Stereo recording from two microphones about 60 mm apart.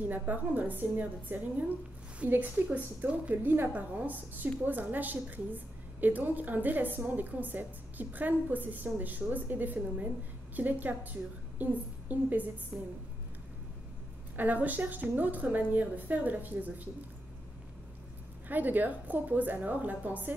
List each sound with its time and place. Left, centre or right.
0.0 s a woman's voice: right
12.7 s a woman's voice: centre
14.3 s a woman's voice: right
18.5 s a woman's voice: right